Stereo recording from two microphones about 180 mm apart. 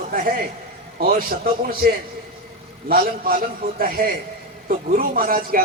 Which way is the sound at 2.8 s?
50° right (ahead or behind).